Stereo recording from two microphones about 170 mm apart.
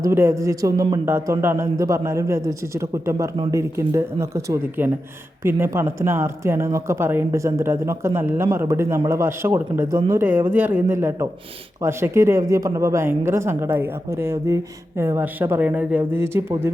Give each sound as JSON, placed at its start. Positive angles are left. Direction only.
{"t": 0.0, "sound": "speech", "side_deg": -15}